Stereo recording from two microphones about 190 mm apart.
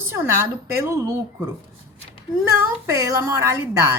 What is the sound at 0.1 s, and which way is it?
A woman's voice, 15° right (ahead or behind).